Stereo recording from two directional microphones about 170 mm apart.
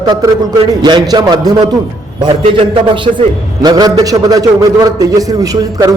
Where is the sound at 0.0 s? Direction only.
25° right (ahead or behind).